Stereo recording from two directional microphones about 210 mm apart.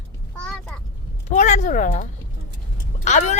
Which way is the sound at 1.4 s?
35° left (ahead or behind).